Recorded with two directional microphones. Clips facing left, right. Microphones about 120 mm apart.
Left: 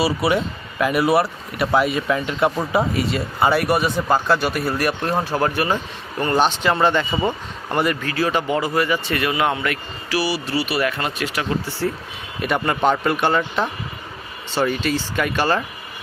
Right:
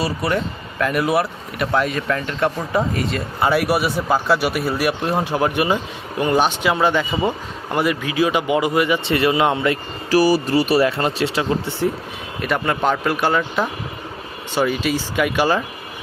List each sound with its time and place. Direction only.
0.0 s speech: 10° left (ahead or behind); by 9.7 s 25° right (ahead or behind)
10.1 s speech: 45° right (ahead or behind); by 11.9 s 25° right (ahead or behind)
12.4 s speech: centre (ahead or behind)